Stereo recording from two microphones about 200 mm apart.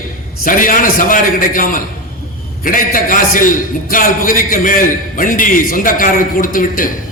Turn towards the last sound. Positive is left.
turn(degrees=45)  # may be behind; listen again after turning